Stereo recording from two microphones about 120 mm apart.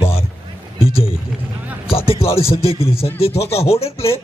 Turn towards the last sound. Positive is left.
turn(degrees=55)  # may be behind; listen again after turning